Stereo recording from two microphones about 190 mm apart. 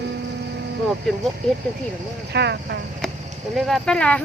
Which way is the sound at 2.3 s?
60° right (ahead or behind).